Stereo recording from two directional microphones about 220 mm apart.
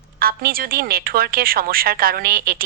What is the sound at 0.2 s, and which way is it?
A woman's voice, 40° right (ahead or behind).